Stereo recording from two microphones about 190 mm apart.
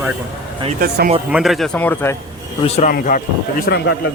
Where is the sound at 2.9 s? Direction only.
45° left (ahead or behind).